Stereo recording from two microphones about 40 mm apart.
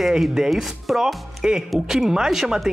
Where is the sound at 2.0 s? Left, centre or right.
Centre.